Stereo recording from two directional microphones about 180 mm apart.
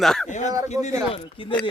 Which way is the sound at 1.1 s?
30° left (ahead or behind).